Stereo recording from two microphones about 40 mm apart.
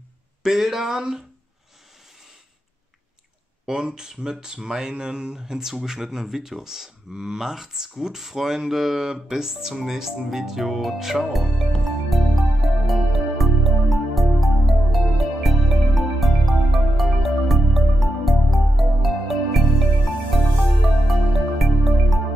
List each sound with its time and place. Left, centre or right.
0.4 s speech: centre
3.6 s speech: centre
12.1 s music: centre